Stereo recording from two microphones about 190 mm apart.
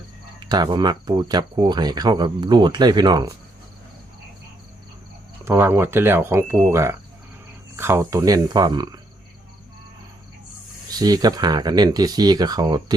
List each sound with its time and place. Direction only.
0.3 s speech: 20° right (ahead or behind)
5.5 s speech: 10° right (ahead or behind)
10.9 s speech: 20° right (ahead or behind)